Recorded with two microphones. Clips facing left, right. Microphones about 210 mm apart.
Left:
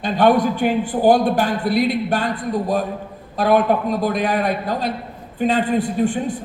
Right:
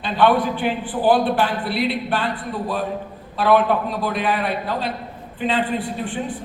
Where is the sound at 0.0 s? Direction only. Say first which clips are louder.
Left 2 dB; 45° left (ahead or behind).